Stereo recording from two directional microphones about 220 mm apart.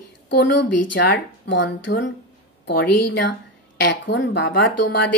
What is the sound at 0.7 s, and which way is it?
Speech, 90° left.